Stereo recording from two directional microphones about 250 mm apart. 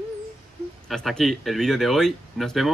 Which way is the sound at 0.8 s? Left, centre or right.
Centre.